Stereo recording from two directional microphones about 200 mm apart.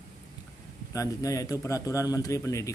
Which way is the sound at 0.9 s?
15° left (ahead or behind).